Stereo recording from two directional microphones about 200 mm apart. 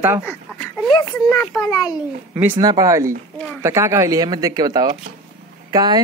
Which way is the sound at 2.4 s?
15° right (ahead or behind).